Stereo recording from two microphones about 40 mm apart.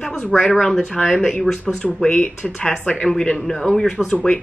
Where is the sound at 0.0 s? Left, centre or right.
Centre.